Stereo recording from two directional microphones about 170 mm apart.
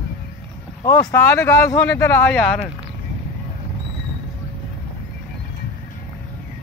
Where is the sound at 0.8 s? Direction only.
15° left (ahead or behind).